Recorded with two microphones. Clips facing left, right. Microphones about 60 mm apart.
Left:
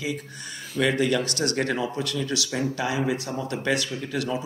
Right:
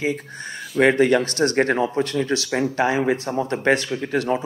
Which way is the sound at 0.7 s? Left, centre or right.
Right.